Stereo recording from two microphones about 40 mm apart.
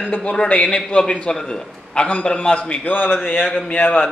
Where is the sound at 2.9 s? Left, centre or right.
Left.